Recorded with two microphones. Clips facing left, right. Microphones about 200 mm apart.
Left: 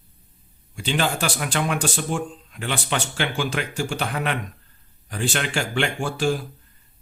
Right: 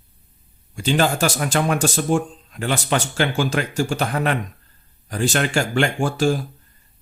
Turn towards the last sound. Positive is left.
turn(degrees=-45)  # may be behind; listen again after turning